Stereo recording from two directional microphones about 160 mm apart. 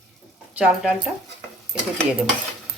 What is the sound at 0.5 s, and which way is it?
Speech, 5° right (ahead or behind).